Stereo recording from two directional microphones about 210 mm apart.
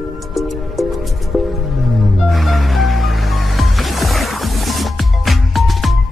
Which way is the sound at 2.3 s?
Centre (ahead or behind).